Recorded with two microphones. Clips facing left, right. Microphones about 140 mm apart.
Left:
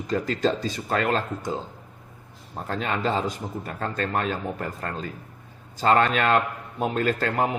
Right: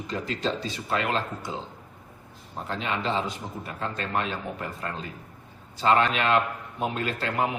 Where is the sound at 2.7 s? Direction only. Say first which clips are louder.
Left 3 dB; 45° left (ahead or behind).